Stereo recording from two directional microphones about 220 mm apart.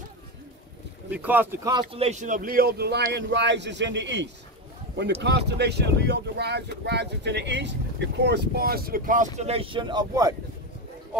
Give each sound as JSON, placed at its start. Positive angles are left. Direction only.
{"t": 1.1, "sound": "speech", "side_deg": -5}